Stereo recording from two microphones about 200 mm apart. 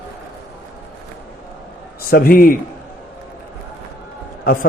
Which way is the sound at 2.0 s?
50° left (ahead or behind).